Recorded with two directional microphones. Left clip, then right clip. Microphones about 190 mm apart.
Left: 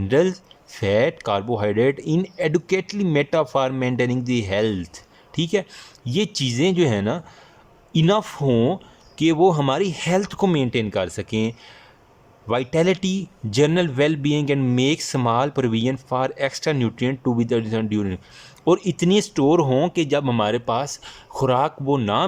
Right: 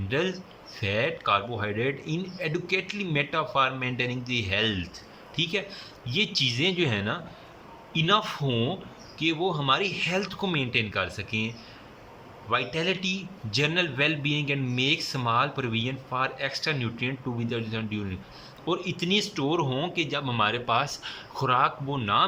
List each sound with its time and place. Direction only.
0.1 s a man's voice: 35° left (ahead or behind)